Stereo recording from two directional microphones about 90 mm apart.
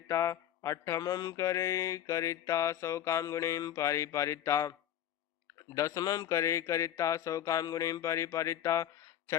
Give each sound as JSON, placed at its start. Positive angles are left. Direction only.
{"t": 0.1, "sound": "mantra", "side_deg": 35}